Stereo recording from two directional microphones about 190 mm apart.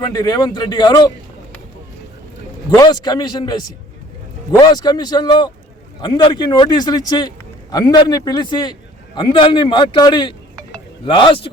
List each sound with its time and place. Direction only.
0.0 s a man's voice: 20° left (ahead or behind)
2.6 s a man's voice: 20° left (ahead or behind)